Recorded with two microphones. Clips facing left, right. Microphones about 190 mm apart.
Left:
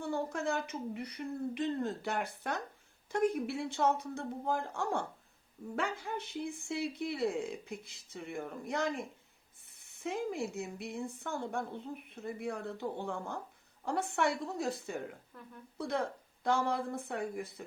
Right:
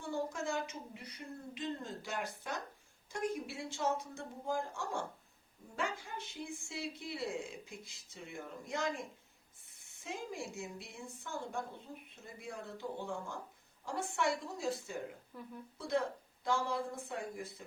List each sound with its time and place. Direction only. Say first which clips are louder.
0.0 s a woman's voice: left 3 dB; 60° left (ahead or behind)